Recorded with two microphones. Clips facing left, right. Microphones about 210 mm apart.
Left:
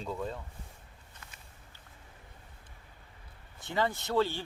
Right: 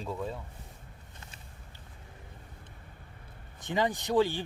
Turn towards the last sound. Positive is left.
turn(degrees=-15)  # may be behind; listen again after turning